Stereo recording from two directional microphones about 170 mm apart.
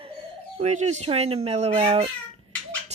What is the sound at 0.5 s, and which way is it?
Speech, 45° right (ahead or behind).